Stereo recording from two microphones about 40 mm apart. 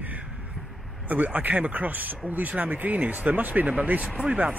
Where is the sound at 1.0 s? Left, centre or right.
Right.